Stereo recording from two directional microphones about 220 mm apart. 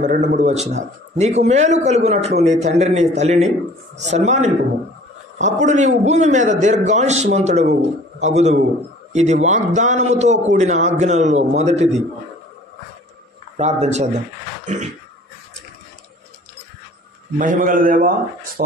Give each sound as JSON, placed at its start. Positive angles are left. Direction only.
{"t": 0.0, "sound": "a man's voice", "side_deg": -35}
{"t": 13.6, "sound": "a man's voice", "side_deg": -30}
{"t": 14.6, "sound": "a sound", "side_deg": -35}
{"t": 17.4, "sound": "a man's voice", "side_deg": -40}